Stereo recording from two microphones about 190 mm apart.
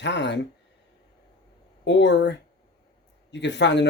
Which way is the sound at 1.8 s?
65° left (ahead or behind).